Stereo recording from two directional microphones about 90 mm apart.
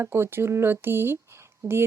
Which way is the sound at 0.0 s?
25° right (ahead or behind).